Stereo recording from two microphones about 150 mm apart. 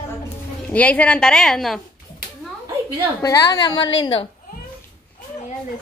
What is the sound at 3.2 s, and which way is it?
A woman's voice, 25° left (ahead or behind).